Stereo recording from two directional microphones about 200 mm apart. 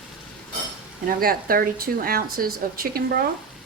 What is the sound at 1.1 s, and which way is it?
A woman's voice, 45° right (ahead or behind).